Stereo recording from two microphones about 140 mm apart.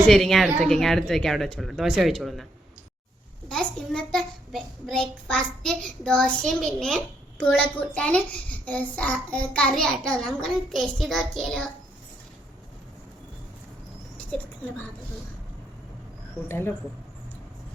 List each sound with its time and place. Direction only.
0.1 s a child's voice: centre (ahead or behind)
3.5 s a child's voice: 5° left (ahead or behind)
16.5 s speech: 15° left (ahead or behind)